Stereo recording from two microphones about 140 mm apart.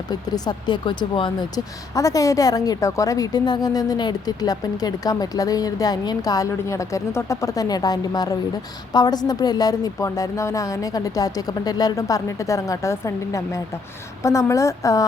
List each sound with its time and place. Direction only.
0.1 s speech: 30° left (ahead or behind)